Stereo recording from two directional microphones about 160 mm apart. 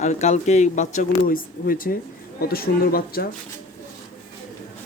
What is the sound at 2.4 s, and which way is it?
Speech, 70° left (ahead or behind).